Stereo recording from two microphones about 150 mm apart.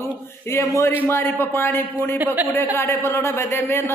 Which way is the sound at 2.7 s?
15° left (ahead or behind).